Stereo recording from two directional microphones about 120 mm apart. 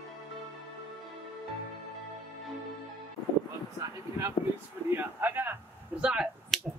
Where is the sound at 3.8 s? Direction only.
25° right (ahead or behind); by 6.3 s 10° right (ahead or behind).